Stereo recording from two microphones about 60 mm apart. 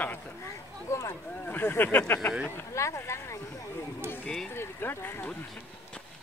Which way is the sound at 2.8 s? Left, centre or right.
Left.